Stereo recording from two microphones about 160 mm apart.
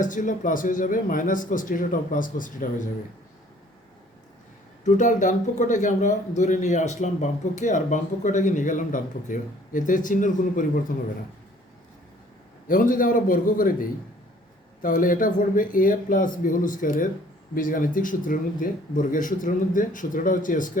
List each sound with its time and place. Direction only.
0.0 s speech: 55° left (ahead or behind)
4.8 s a man's voice: 50° left (ahead or behind)
12.6 s speech: 55° left (ahead or behind)